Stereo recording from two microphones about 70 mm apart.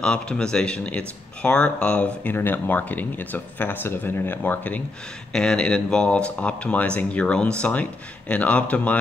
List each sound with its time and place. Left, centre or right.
0.0 s speech: centre
2.2 s speech: left
5.3 s speech: centre